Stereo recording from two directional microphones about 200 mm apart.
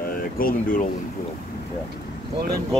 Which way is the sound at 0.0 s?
45° left (ahead or behind).